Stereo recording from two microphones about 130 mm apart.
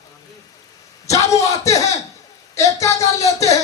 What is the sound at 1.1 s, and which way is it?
Speech, 25° left (ahead or behind).